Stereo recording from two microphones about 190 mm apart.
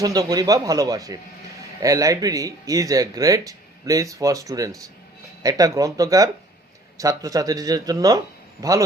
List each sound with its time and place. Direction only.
0.0 s speech: 20° right (ahead or behind)